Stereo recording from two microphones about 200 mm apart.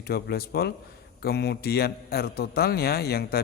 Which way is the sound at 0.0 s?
50° left (ahead or behind).